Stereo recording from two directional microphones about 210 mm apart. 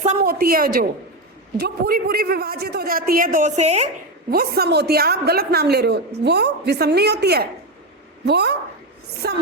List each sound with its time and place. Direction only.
0.0 s a woman's voice: 40° right (ahead or behind)
4.3 s a woman's voice: 50° right (ahead or behind)